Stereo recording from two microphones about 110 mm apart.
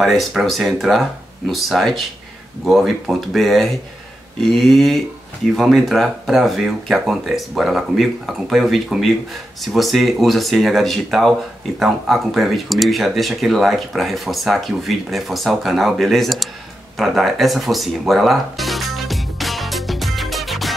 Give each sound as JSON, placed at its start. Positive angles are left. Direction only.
{"t": 0.0, "sound": "speech", "side_deg": 0}
{"t": 16.9, "sound": "music", "side_deg": 0}